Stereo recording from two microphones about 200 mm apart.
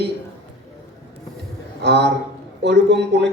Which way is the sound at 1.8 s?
60° right (ahead or behind).